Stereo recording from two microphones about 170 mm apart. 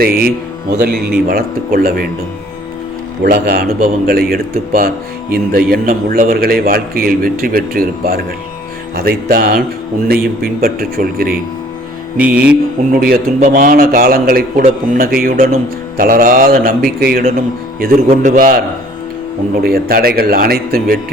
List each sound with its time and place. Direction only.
0.0 s a man's voice: 60° right (ahead or behind)
3.2 s a man's voice: 65° right (ahead or behind)
12.1 s mantra: 10° right (ahead or behind)
12.9 s a man's voice: 60° right (ahead or behind)
18.1 s a man's voice: 50° right (ahead or behind)
19.6 s a man's voice: 65° right (ahead or behind)